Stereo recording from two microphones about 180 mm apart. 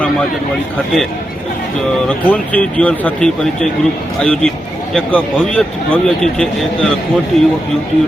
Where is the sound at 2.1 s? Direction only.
5° left (ahead or behind).